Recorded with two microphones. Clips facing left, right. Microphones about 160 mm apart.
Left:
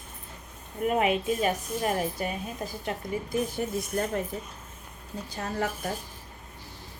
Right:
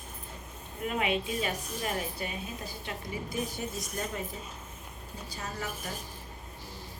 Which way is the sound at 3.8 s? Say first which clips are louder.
Left 7 dB; 60° left (ahead or behind).